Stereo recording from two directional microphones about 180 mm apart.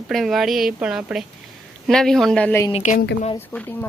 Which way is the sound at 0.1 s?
Centre (ahead or behind).